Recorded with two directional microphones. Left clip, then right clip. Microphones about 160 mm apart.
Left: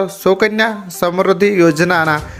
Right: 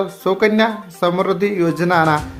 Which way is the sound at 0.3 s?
25° left (ahead or behind).